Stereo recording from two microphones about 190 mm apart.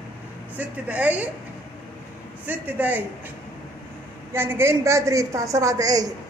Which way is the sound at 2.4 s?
10° right (ahead or behind).